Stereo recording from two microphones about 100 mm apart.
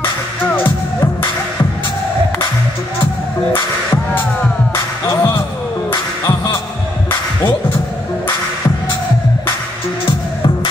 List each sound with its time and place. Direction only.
3.5 s music: 25° left (ahead or behind)
4.7 s music: 35° left (ahead or behind)
10.0 s music: 55° left (ahead or behind)